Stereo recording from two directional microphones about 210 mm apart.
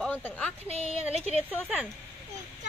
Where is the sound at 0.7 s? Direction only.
35° left (ahead or behind).